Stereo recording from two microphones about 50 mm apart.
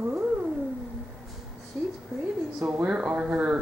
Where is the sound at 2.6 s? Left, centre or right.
Right.